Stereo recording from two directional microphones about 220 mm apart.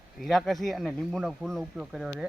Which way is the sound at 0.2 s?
Centre (ahead or behind).